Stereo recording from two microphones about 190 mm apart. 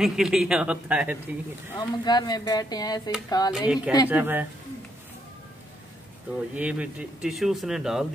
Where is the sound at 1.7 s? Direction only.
20° left (ahead or behind).